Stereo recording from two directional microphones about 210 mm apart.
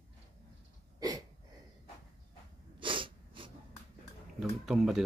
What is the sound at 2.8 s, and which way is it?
Sneeze, 25° right (ahead or behind).